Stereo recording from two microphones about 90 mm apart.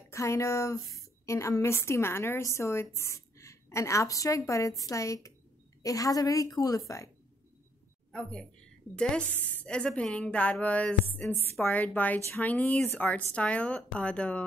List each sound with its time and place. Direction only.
0.1 s a woman's voice: 35° left (ahead or behind)
8.1 s a woman's voice: 10° left (ahead or behind)